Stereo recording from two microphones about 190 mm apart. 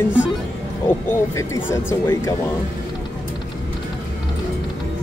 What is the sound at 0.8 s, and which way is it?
Speech, 15° left (ahead or behind).